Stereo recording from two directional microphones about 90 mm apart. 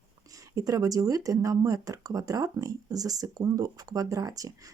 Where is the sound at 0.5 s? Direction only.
40° right (ahead or behind).